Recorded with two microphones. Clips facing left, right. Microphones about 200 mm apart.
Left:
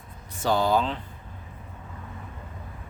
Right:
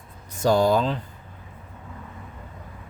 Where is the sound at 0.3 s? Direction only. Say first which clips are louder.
Right 4 dB; 45° right (ahead or behind).